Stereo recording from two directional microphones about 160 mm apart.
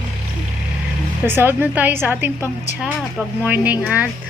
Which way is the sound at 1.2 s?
10° right (ahead or behind).